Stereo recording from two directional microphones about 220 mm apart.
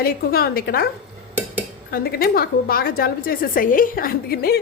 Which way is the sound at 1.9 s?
45° left (ahead or behind).